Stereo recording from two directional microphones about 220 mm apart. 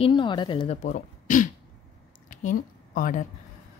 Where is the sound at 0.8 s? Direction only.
35° left (ahead or behind).